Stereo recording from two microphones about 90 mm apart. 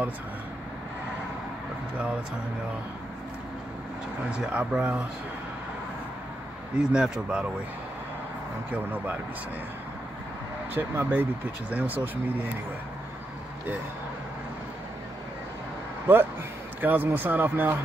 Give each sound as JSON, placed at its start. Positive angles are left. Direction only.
{"t": 4.3, "sound": "speech", "side_deg": -10}
{"t": 6.8, "sound": "speech", "side_deg": -10}
{"t": 8.7, "sound": "speech", "side_deg": -20}
{"t": 10.7, "sound": "speech", "side_deg": -20}
{"t": 16.1, "sound": "speech", "side_deg": -20}